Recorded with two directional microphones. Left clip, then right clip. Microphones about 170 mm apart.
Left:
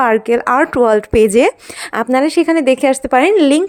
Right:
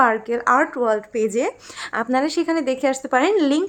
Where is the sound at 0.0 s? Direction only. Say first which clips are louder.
Left 5 dB; 45° left (ahead or behind).